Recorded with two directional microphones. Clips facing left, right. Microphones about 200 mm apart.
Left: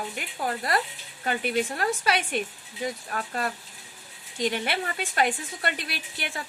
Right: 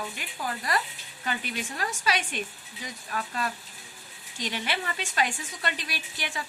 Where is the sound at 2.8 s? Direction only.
45° left (ahead or behind).